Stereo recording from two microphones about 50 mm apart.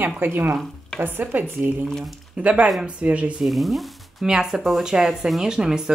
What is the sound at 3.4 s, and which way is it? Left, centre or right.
Speech, centre.